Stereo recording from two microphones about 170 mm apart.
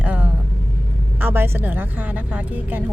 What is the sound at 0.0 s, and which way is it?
Vehicle, 10° right (ahead or behind).